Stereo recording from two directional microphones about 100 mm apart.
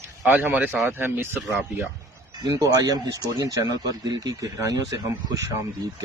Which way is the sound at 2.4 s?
35° right (ahead or behind).